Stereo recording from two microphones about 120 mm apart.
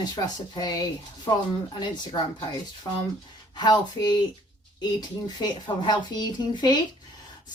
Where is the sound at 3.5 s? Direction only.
35° left (ahead or behind).